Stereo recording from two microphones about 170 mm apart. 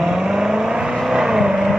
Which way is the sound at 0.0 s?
5° right (ahead or behind).